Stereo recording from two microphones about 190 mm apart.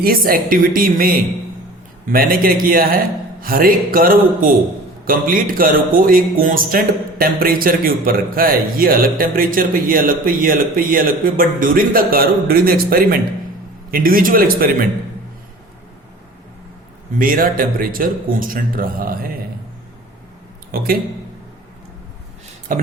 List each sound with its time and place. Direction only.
0.0 s speech: 50° right (ahead or behind)
17.2 s speech: 45° right (ahead or behind)
20.7 s speech: 50° right (ahead or behind)
22.7 s speech: 45° right (ahead or behind)